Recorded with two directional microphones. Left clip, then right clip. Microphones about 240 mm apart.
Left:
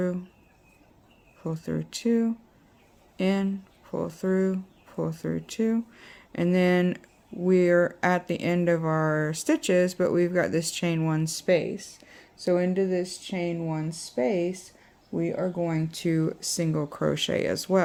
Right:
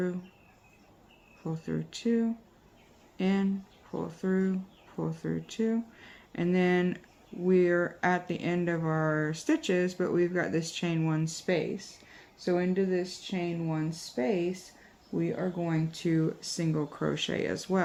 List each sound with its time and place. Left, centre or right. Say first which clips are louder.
1.5 s speech: left 4 dB; left